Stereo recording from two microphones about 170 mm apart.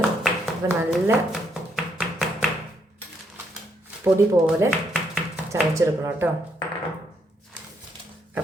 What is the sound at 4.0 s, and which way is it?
Speech, 15° right (ahead or behind).